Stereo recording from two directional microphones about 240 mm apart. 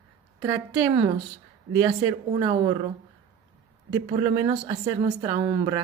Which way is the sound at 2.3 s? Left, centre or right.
Centre.